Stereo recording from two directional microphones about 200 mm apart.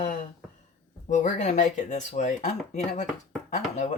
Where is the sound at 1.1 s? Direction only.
35° left (ahead or behind).